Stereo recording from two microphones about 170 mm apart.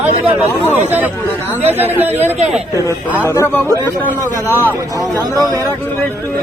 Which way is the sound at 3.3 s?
15° left (ahead or behind).